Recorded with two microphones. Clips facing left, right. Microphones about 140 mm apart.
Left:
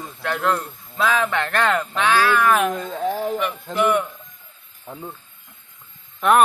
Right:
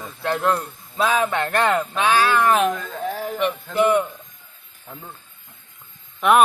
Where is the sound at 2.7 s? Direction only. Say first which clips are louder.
Left 3 dB; 25° left (ahead or behind).